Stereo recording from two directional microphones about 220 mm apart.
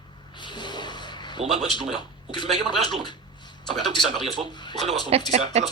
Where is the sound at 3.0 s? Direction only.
20° left (ahead or behind).